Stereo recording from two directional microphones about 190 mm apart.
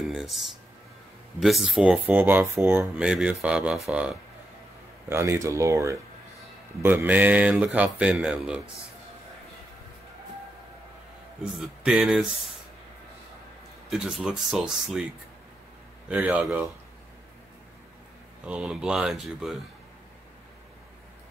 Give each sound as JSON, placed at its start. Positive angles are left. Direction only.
{"t": 0.0, "sound": "music", "side_deg": 0}
{"t": 1.4, "sound": "speech", "side_deg": 0}
{"t": 5.1, "sound": "speech", "side_deg": -15}
{"t": 11.5, "sound": "speech", "side_deg": 0}
{"t": 13.8, "sound": "speech", "side_deg": -5}
{"t": 16.1, "sound": "speech", "side_deg": -10}
{"t": 18.4, "sound": "speech", "side_deg": -5}